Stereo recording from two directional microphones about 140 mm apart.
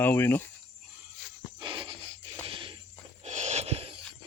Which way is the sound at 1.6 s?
40° right (ahead or behind).